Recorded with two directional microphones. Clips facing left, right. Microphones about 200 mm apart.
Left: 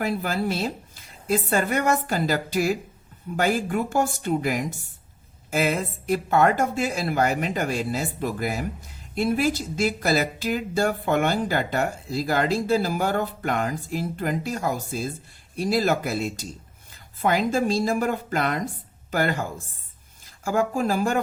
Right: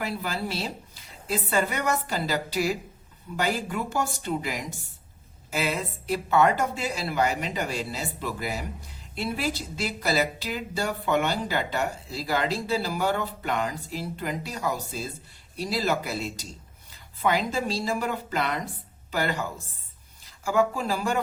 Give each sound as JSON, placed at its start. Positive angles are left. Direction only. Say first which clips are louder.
{"t": 0.0, "sound": "speech", "louder": "left 5 dB", "side_deg": 50}